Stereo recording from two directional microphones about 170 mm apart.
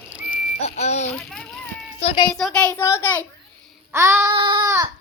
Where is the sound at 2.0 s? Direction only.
30° left (ahead or behind).